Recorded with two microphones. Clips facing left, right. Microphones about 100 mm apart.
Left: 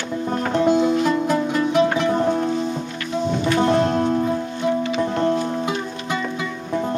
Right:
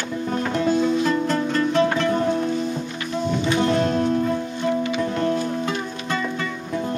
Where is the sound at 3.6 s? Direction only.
25° left (ahead or behind).